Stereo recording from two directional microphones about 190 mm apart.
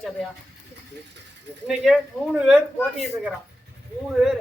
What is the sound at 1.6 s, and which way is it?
Speech, centre (ahead or behind).